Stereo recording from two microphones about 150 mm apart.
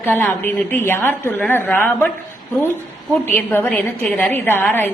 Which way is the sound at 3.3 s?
15° left (ahead or behind).